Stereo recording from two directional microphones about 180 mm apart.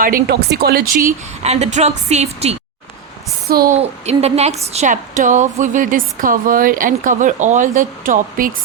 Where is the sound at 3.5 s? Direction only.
55° right (ahead or behind).